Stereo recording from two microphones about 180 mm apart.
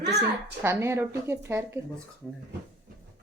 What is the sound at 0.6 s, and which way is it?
Speech, 15° right (ahead or behind).